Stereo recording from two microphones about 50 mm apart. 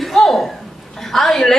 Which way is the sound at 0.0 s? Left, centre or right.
Centre.